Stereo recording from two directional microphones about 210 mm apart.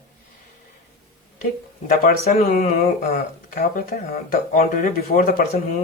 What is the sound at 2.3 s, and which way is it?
Speech, 40° left (ahead or behind).